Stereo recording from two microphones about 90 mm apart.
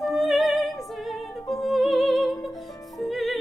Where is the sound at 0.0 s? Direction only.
Centre (ahead or behind).